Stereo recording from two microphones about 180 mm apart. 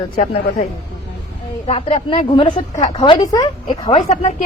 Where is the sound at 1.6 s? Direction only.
35° left (ahead or behind).